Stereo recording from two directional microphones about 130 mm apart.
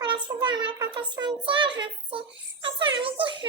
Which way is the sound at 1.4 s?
40° right (ahead or behind).